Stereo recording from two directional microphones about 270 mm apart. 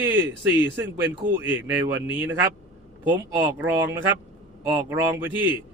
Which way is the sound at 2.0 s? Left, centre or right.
Centre.